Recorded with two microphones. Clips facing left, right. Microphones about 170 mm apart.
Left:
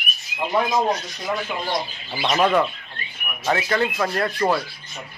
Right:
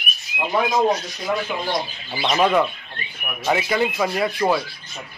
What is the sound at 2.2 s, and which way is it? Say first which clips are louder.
Speech: right 1 dB; 5° right (ahead or behind).